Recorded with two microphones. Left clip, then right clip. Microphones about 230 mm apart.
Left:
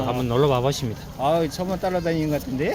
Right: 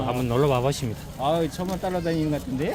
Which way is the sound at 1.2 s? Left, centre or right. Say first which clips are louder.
Left 3 dB; left.